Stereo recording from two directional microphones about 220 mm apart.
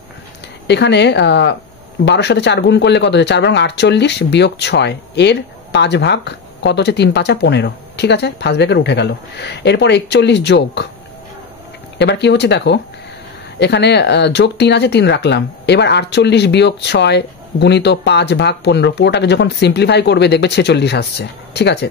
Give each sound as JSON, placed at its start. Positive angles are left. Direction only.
{"t": 0.7, "sound": "speech", "side_deg": 50}
{"t": 12.0, "sound": "speech", "side_deg": 50}